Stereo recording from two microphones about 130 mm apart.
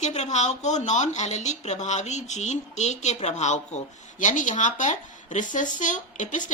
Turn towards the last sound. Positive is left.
turn(degrees=70)  # may be behind; listen again after turning